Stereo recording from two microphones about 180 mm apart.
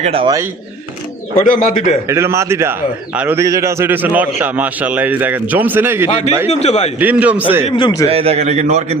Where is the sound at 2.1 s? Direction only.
15° right (ahead or behind).